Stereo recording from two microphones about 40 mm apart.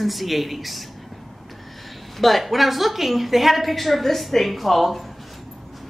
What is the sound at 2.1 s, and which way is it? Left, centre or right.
Speech, centre.